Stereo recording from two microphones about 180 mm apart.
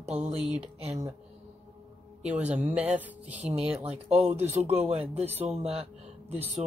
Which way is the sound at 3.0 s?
10° right (ahead or behind).